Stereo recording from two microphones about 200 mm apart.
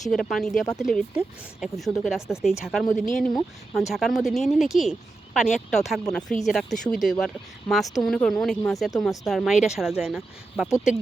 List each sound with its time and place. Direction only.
0.0 s speech: centre (ahead or behind)